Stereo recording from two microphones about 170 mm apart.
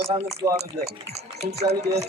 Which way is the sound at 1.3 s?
40° right (ahead or behind).